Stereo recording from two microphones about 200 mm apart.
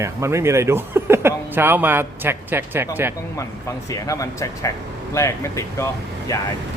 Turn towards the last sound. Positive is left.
turn(degrees=15)  # may be behind; listen again after turning